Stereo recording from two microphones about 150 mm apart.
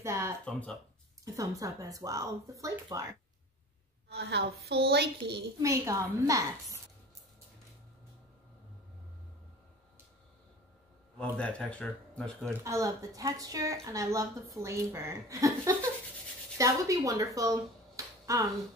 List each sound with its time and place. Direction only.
0.0 s a sound: 20° right (ahead or behind)
1.2 s a woman's voice: 20° right (ahead or behind)
4.1 s a woman's voice: 90° right
5.6 s a woman's voice: 20° right (ahead or behind)
11.1 s speech: 10° left (ahead or behind)
12.6 s a woman's voice: 20° right (ahead or behind)